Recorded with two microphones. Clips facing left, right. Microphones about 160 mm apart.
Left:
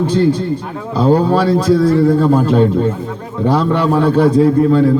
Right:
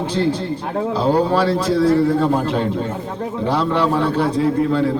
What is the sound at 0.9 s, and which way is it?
A man's voice, 45° left (ahead or behind).